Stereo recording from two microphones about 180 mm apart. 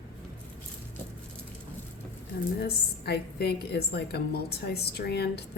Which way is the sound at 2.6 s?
60° left (ahead or behind).